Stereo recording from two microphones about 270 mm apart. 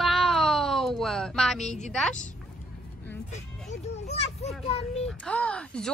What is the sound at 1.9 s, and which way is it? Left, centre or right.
Speech, centre.